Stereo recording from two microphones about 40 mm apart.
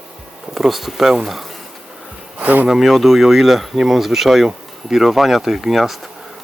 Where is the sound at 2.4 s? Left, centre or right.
Right.